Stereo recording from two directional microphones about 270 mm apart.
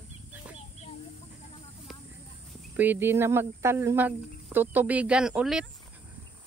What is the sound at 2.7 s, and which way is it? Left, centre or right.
Speech, centre.